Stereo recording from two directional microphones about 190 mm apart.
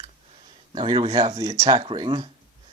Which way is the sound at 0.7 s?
25° right (ahead or behind).